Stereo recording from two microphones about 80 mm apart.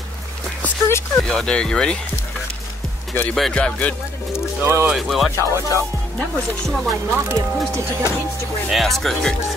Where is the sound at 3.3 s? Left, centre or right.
Centre.